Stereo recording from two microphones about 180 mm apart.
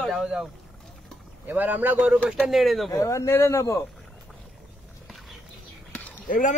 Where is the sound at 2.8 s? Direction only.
20° left (ahead or behind).